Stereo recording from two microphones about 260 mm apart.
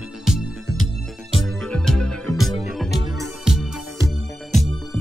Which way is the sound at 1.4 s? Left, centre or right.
Centre.